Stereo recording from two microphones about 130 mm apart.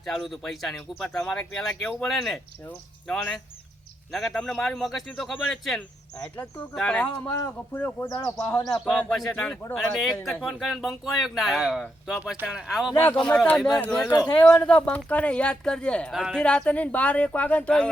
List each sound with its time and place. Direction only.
0.0 s speech: centre (ahead or behind)
2.6 s speech: 15° left (ahead or behind)
4.1 s speech: centre (ahead or behind); by 8.2 s 20° left (ahead or behind)
8.7 s speech: centre (ahead or behind)
12.9 s speech: 15° left (ahead or behind); by 13.8 s centre (ahead or behind)
14.3 s speech: 10° left (ahead or behind)